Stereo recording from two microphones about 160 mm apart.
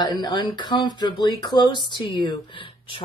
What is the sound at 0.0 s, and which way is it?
Speech, 25° left (ahead or behind).